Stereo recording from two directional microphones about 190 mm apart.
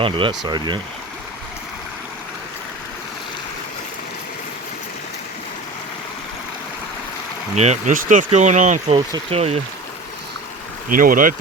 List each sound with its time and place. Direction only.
0.0 s speech: 25° right (ahead or behind)
7.5 s speech: 35° right (ahead or behind)
10.8 s speech: 45° right (ahead or behind)